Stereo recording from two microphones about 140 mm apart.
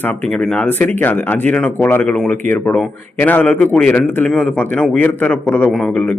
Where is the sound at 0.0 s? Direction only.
10° left (ahead or behind).